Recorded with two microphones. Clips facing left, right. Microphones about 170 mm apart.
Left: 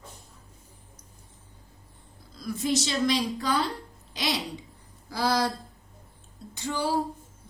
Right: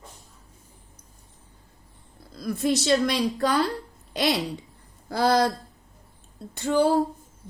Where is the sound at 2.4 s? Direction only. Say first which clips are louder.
Right 3 dB; 60° right (ahead or behind).